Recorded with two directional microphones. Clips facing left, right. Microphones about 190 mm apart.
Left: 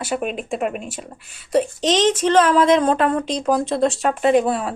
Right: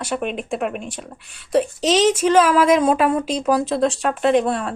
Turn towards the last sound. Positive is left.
turn(degrees=5)  # may be behind; listen again after turning